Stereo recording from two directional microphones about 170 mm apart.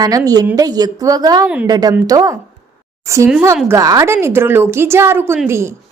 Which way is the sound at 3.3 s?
5° right (ahead or behind).